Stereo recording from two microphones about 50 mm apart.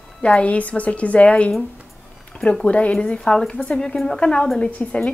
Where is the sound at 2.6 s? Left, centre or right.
Left; by 4.3 s centre.